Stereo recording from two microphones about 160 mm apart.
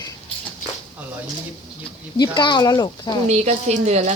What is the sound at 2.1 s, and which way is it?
Speech, 25° left (ahead or behind).